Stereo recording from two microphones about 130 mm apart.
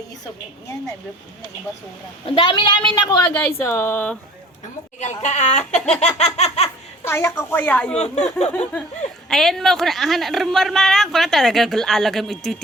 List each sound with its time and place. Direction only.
2.2 s a woman's voice: 40° left (ahead or behind); by 4.2 s 10° left (ahead or behind)
4.9 s speech: 60° left (ahead or behind)
7.0 s speech: 20° left (ahead or behind)
7.9 s speech: 60° left (ahead or behind)
9.3 s a woman's voice: centre (ahead or behind)